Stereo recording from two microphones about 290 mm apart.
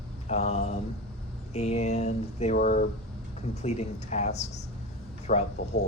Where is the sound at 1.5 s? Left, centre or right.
Left.